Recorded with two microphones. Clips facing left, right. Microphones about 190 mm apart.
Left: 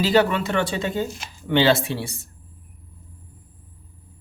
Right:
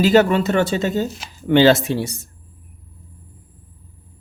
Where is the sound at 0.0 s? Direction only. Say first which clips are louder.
Right 5 dB; 45° right (ahead or behind).